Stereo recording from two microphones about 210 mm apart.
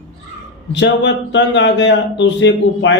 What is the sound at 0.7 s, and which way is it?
Speech, 55° left (ahead or behind).